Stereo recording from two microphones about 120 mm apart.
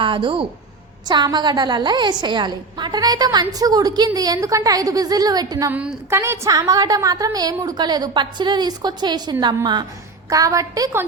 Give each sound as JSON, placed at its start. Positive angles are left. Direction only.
{"t": 0.0, "sound": "a woman's voice", "side_deg": -45}
{"t": 5.7, "sound": "a woman's voice", "side_deg": -15}